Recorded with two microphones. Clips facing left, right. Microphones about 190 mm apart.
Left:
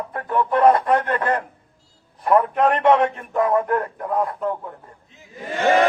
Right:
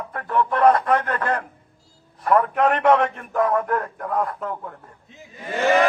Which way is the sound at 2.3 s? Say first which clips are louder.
Left 1 dB; centre (ahead or behind).